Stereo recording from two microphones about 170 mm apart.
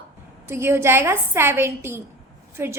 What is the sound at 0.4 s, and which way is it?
A woman's voice, 15° right (ahead or behind).